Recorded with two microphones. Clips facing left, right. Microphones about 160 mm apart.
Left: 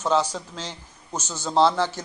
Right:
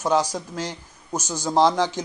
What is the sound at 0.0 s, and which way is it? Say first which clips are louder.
A man's voice: right 1 dB; 10° right (ahead or behind).